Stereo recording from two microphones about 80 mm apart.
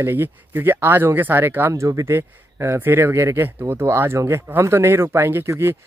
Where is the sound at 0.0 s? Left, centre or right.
Right.